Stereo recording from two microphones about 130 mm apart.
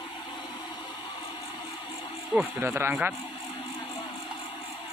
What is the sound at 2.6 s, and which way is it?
Speech, 20° right (ahead or behind).